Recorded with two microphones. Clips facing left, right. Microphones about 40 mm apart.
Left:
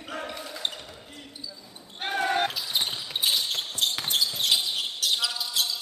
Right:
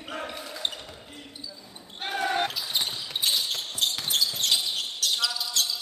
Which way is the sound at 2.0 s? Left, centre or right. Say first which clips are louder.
Left 1 dB; centre.